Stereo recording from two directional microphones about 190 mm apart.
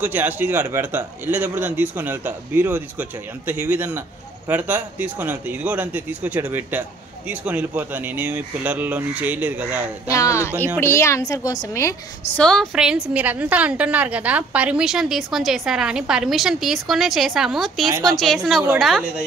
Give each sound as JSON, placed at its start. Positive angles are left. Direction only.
{"t": 0.0, "sound": "a man's voice", "side_deg": -10}
{"t": 10.0, "sound": "a woman's voice", "side_deg": 15}
{"t": 12.4, "sound": "a woman's voice", "side_deg": 5}